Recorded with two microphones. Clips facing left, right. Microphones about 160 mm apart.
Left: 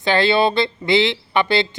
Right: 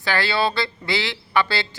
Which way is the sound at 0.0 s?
20° left (ahead or behind).